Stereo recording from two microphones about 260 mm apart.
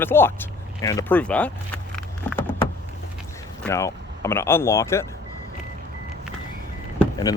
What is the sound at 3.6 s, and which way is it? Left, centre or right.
Speech, centre.